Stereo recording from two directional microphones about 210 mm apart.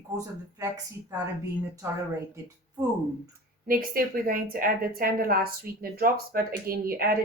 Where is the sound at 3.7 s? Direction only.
40° right (ahead or behind).